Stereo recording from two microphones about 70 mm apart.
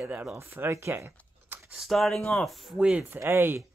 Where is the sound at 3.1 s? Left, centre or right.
Right.